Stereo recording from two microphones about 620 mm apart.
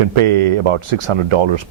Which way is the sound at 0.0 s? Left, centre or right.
Right.